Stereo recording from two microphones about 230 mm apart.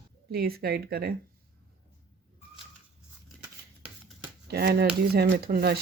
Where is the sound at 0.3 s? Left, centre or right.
Right.